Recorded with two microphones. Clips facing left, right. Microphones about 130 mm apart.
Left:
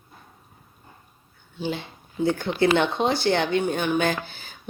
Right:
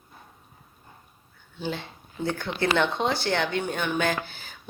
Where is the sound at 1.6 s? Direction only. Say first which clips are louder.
Left 3 dB; 15° left (ahead or behind).